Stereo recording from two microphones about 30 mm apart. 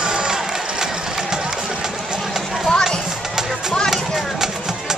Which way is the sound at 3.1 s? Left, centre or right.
Centre.